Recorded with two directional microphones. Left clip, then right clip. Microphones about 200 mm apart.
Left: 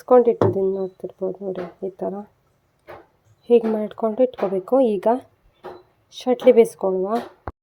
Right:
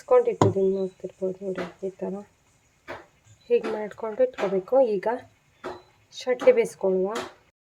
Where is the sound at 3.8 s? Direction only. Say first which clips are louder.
Left 5 dB; 30° left (ahead or behind).